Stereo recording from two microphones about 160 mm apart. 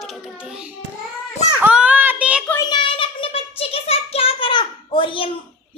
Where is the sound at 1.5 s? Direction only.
10° right (ahead or behind).